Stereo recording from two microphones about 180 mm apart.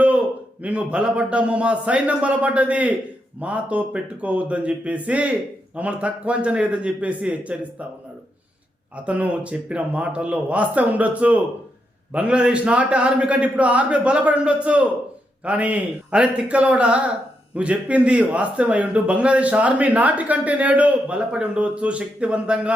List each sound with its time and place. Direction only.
0.0 s a man's voice: 10° right (ahead or behind)
9.0 s a man's voice: 5° right (ahead or behind)